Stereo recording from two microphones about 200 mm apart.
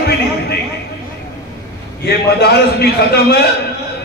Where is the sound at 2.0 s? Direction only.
55° left (ahead or behind).